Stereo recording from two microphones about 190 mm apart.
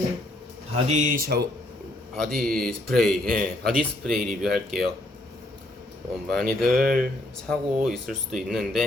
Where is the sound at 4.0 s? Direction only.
Centre (ahead or behind).